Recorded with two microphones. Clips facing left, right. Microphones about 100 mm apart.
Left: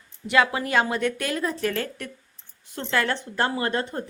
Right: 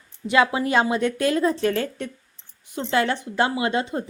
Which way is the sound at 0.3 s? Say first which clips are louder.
Right 2 dB; 20° right (ahead or behind).